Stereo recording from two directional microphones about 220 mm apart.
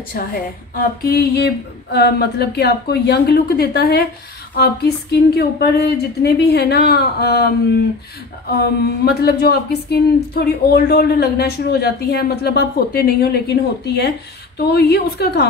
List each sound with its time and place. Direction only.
0.1 s speech: 45° left (ahead or behind)
9.0 s speech: 45° left (ahead or behind)